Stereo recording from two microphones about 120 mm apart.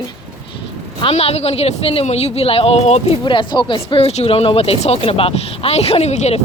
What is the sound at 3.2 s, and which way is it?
Speech, 40° left (ahead or behind).